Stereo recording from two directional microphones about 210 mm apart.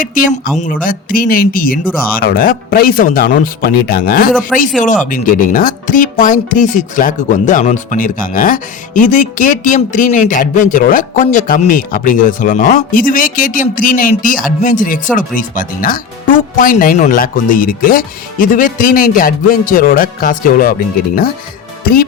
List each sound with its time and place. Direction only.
0.0 s speech: 40° left (ahead or behind)